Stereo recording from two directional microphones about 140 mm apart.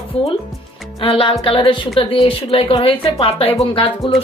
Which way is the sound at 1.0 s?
40° left (ahead or behind).